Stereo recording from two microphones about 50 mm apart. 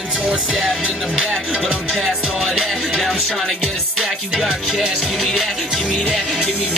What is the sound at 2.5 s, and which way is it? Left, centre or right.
Music, centre.